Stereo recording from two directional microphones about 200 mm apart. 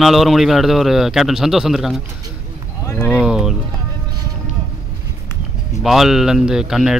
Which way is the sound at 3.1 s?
5° right (ahead or behind).